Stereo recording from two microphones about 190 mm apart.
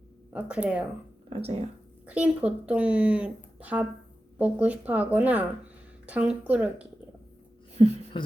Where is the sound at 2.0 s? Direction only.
5° right (ahead or behind).